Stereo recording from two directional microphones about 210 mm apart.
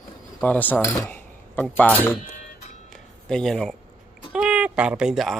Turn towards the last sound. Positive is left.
turn(degrees=0)  # may be behind; listen again after turning